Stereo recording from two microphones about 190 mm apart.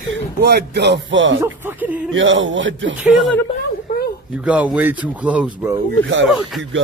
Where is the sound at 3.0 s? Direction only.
Centre (ahead or behind).